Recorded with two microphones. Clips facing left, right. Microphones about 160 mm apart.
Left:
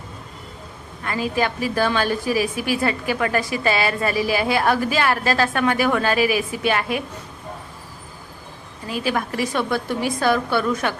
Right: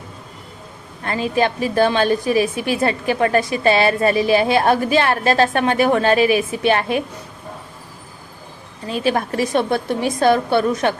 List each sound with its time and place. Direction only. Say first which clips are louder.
1.0 s a woman's voice: right 4 dB; 25° right (ahead or behind)
8.9 s a woman's voice: right 4 dB; 25° right (ahead or behind)